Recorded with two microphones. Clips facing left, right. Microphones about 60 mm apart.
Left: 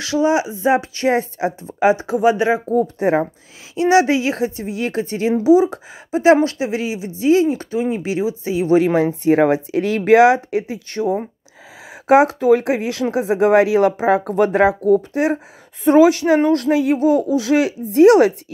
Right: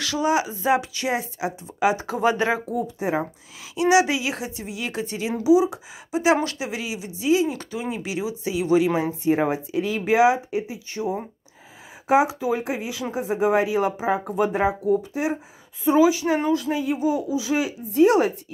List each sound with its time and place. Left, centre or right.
0.0 s speech: left
2.1 s speech: centre
2.7 s speech: left
3.7 s speech: left
7.4 s speech: left
8.9 s speech: left